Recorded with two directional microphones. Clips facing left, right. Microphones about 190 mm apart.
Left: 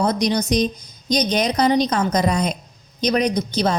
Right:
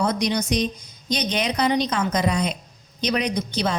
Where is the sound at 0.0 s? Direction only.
35° left (ahead or behind).